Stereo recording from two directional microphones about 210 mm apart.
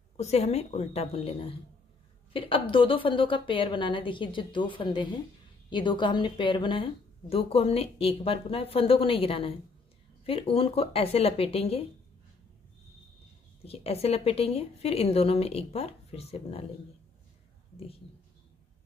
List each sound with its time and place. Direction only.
0.2 s a woman's voice: 30° left (ahead or behind)
13.7 s a woman's voice: 30° left (ahead or behind)